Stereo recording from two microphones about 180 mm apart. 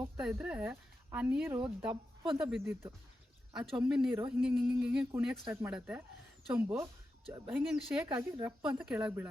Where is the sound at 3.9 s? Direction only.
5° right (ahead or behind).